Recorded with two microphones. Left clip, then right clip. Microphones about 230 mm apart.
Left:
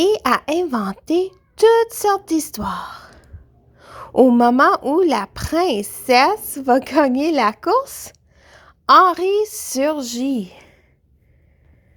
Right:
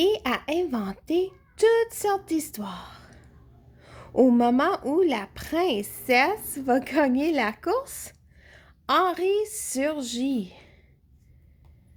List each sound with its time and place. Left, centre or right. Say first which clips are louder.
0.0 s a woman's voice: left 8 dB; left